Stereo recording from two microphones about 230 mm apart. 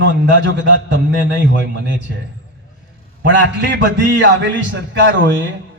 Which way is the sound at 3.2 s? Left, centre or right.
Right.